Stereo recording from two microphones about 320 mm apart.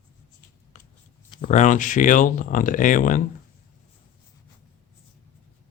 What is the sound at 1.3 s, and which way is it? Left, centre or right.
Speech, left.